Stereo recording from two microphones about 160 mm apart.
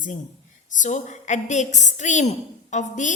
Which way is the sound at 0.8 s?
50° left (ahead or behind).